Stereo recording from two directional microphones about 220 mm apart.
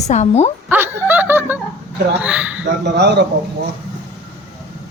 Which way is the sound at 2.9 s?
50° right (ahead or behind).